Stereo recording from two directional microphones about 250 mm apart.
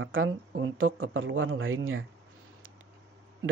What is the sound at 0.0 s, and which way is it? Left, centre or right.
Speech, right.